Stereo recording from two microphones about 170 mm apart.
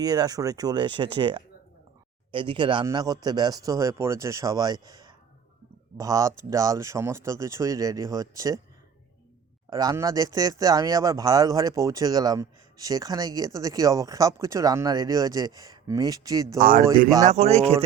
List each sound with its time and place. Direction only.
0.0 s speech: 25° right (ahead or behind)
9.6 s speech: 20° right (ahead or behind)
16.6 s speech: 55° right (ahead or behind)
17.2 s a man's voice: 40° right (ahead or behind)